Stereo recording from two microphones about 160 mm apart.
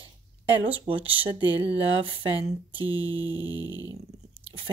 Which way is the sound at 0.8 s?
35° right (ahead or behind).